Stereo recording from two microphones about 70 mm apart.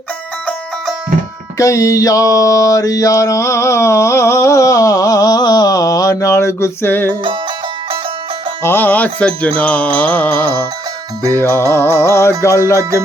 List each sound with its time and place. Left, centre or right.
1.5 s mantra: left
8.6 s music: left
11.9 s music: left